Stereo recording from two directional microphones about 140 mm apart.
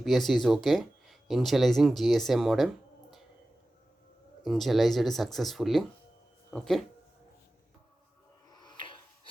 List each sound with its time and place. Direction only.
0.0 s speech: centre (ahead or behind)
4.4 s speech: centre (ahead or behind)
8.4 s music: 30° left (ahead or behind)